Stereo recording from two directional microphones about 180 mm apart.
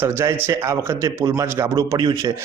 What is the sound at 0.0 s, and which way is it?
A man's voice, 15° right (ahead or behind).